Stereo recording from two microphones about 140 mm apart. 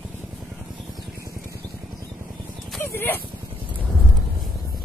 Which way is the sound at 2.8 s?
15° left (ahead or behind).